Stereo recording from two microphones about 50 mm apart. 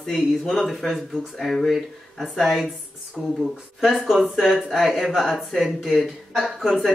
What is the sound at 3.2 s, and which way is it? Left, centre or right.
Speech, right.